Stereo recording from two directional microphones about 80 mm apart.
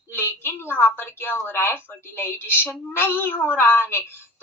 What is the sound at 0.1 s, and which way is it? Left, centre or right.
Speech, left.